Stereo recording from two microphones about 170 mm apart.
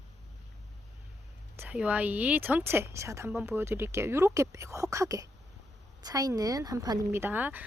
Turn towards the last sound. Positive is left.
turn(degrees=-10)  # may be behind; listen again after turning